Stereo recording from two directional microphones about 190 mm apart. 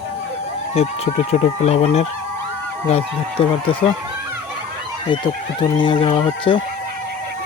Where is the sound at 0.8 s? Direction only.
35° left (ahead or behind).